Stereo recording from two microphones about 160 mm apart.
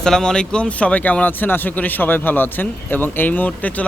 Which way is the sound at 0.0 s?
5° left (ahead or behind).